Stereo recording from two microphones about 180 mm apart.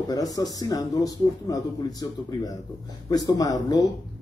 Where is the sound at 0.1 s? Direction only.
20° left (ahead or behind).